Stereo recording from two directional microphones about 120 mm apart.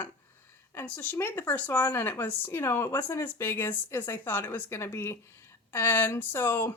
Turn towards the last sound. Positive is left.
turn(degrees=20)  # may be behind; listen again after turning